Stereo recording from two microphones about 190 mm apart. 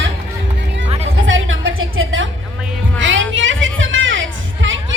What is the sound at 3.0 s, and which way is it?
Music, 90° right.